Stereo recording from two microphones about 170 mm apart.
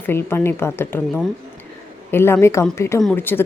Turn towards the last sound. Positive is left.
turn(degrees=10)  # may be behind; listen again after turning